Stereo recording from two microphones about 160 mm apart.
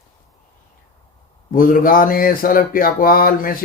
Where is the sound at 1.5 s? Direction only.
60° left (ahead or behind).